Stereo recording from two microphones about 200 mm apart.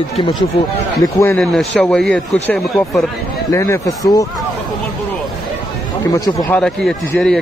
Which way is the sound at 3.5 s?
15° left (ahead or behind).